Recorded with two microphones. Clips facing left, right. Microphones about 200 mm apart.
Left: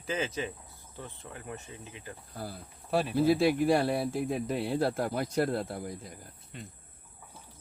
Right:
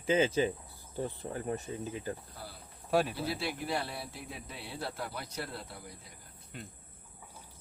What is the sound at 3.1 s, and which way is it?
Speech, 50° left (ahead or behind).